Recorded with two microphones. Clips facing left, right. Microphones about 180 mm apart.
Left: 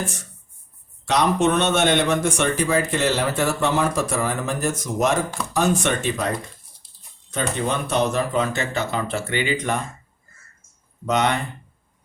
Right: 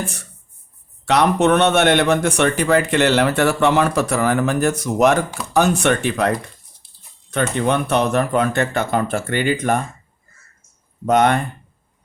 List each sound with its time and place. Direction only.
1.0 s speech: 65° right (ahead or behind)
11.0 s speech: 50° right (ahead or behind)